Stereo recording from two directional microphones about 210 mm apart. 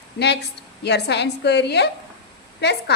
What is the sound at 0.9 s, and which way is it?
A woman's voice, 55° left (ahead or behind).